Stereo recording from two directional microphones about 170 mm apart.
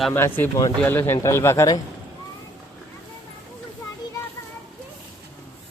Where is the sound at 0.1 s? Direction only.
10° left (ahead or behind).